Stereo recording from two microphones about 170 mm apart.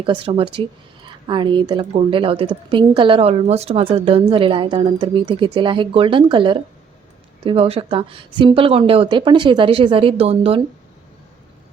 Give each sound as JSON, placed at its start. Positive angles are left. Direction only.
{"t": 0.0, "sound": "a woman's voice", "side_deg": -30}